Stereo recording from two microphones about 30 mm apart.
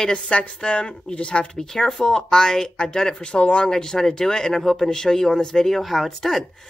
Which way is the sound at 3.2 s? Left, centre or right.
Left.